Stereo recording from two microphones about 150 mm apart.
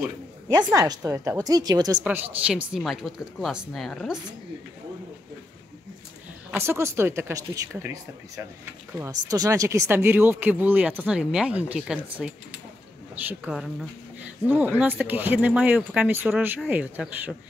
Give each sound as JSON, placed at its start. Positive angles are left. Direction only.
{"t": 0.7, "sound": "a woman's voice", "side_deg": -25}
{"t": 2.0, "sound": "speech", "side_deg": -10}
{"t": 6.5, "sound": "speech", "side_deg": -15}